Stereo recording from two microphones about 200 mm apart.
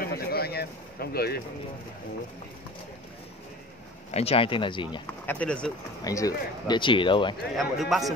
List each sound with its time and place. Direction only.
0.0 s a sound: 50° left (ahead or behind)
4.1 s speech: 30° left (ahead or behind)
5.2 s speech: 10° left (ahead or behind)
6.0 s speech: 20° left (ahead or behind)
7.5 s a man's voice: centre (ahead or behind)